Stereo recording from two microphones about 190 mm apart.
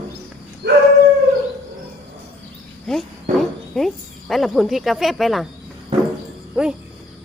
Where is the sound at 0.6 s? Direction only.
60° right (ahead or behind).